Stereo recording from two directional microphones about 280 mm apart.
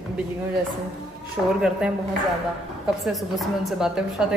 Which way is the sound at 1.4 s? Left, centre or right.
Centre.